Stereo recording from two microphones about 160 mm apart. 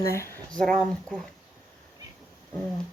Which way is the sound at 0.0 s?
20° left (ahead or behind).